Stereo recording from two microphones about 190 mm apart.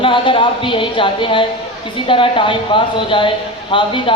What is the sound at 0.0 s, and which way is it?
Speech, 25° left (ahead or behind).